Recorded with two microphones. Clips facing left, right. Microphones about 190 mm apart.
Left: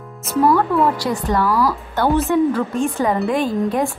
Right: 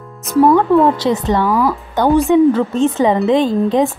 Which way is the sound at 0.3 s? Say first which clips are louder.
Right 5 dB; 20° right (ahead or behind).